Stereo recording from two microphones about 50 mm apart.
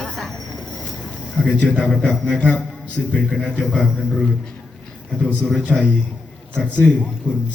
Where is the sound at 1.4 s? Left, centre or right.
Left.